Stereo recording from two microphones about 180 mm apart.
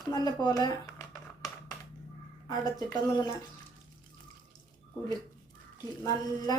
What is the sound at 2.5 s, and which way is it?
Speech, 25° left (ahead or behind).